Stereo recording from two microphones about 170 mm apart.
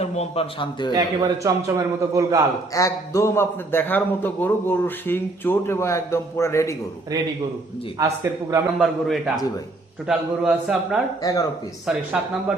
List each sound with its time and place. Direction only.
0.0 s speech: 35° left (ahead or behind)
0.9 s a man's voice: 20° right (ahead or behind)
2.7 s a man's voice: 20° left (ahead or behind)
7.9 s a man's voice: 20° right (ahead or behind)
8.8 s a man's voice: centre (ahead or behind)
11.2 s speech: 20° left (ahead or behind)
11.9 s a man's voice: 5° right (ahead or behind)